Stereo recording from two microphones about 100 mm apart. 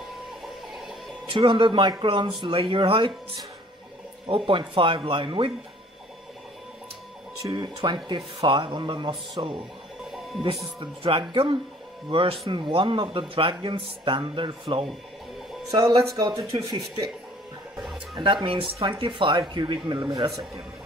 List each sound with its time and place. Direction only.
1.3 s speech: 60° right (ahead or behind)
2.0 s speech: 70° right (ahead or behind)
4.5 s speech: 60° right (ahead or behind)
7.4 s speech: 45° right (ahead or behind)
10.8 s speech: 60° right (ahead or behind)
15.7 s speech: 35° right (ahead or behind)
18.2 s speech: 60° right (ahead or behind); by 20.6 s 35° right (ahead or behind)